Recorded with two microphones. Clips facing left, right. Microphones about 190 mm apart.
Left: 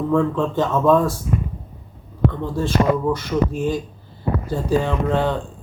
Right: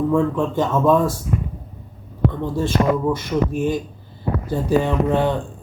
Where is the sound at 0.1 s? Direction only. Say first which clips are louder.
Even; 15° right (ahead or behind).